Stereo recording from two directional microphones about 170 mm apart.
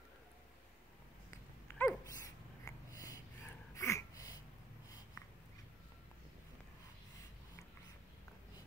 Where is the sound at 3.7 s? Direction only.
15° left (ahead or behind).